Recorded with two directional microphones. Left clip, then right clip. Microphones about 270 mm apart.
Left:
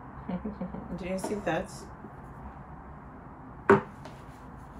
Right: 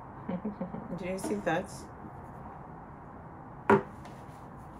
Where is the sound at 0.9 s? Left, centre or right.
Centre.